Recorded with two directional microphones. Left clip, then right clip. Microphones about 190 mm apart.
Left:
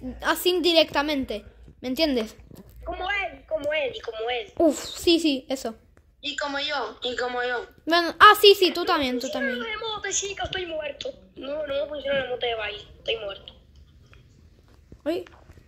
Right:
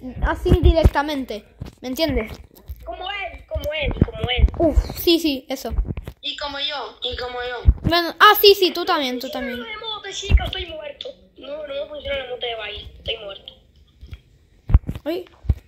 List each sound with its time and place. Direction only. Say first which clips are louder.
0.2 s a woman's voice: right 1 dB; 5° left (ahead or behind)
2.8 s a sound: left 1 dB; 50° left (ahead or behind)
4.6 s a woman's voice: right 3 dB; centre (ahead or behind)
6.2 s speech: right 2 dB; 50° left (ahead or behind)
7.9 s a woman's voice: right 1 dB; centre (ahead or behind)
9.6 s a woman's voice: even; 55° left (ahead or behind)
15.0 s speech: right 2 dB; centre (ahead or behind)